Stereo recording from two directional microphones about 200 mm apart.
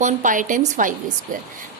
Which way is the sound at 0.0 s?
40° right (ahead or behind).